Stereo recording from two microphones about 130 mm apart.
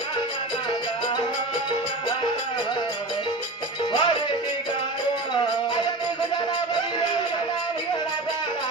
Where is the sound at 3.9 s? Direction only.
40° left (ahead or behind).